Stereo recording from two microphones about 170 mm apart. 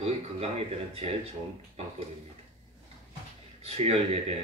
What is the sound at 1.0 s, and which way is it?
Speech, 40° right (ahead or behind).